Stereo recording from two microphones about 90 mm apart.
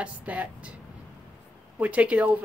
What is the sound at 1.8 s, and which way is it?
Speech, 15° right (ahead or behind).